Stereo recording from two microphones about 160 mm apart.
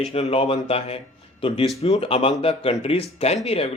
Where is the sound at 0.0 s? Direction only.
40° left (ahead or behind).